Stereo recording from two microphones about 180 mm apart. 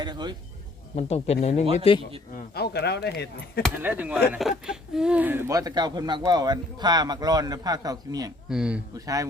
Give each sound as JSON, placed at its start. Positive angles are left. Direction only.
{"t": 0.0, "sound": "speech", "side_deg": -25}
{"t": 0.9, "sound": "speech", "side_deg": 35}
{"t": 2.6, "sound": "speech", "side_deg": 65}
{"t": 3.8, "sound": "speech", "side_deg": -10}
{"t": 8.4, "sound": "speech", "side_deg": -5}